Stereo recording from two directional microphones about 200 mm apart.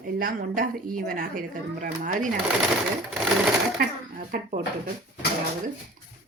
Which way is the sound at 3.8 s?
45° right (ahead or behind).